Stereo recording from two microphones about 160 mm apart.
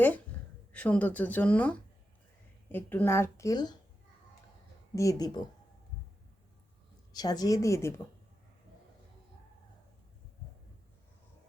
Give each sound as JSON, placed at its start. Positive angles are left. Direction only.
{"t": 0.7, "sound": "speech", "side_deg": 10}
{"t": 4.9, "sound": "a woman's voice", "side_deg": 20}
{"t": 7.1, "sound": "a woman's voice", "side_deg": 25}